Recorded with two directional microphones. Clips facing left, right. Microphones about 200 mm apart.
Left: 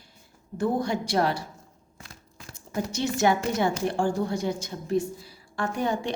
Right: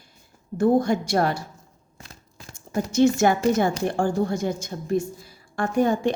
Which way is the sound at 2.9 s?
50° right (ahead or behind).